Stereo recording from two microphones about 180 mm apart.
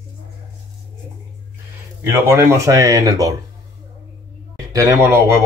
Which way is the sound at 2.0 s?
15° right (ahead or behind).